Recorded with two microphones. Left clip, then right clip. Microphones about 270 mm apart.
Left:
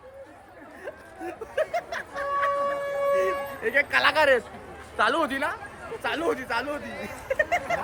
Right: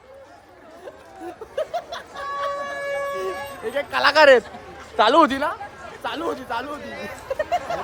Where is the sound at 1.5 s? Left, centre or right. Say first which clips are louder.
Even; centre.